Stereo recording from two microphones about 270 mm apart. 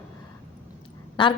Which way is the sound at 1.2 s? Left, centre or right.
Centre.